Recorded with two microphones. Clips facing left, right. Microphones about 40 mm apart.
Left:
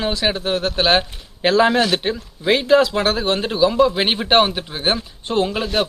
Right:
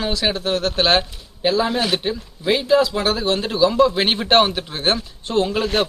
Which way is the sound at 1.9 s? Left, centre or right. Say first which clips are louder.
Left 1 dB; left.